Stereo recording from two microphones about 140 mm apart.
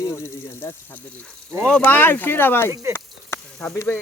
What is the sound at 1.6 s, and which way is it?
Speech, 10° left (ahead or behind).